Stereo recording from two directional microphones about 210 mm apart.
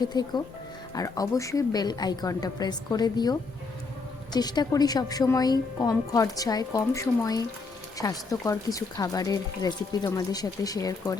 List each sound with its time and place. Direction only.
0.0 s speech: 20° left (ahead or behind)